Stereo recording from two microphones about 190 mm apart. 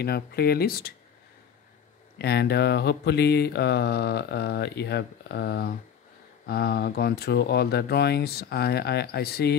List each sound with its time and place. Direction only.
0.0 s speech: 55° left (ahead or behind)
2.1 s speech: 60° left (ahead or behind)